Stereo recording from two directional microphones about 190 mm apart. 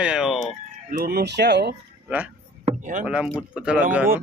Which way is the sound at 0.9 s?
50° right (ahead or behind).